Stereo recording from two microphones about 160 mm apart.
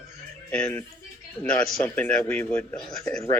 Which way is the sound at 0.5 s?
10° left (ahead or behind).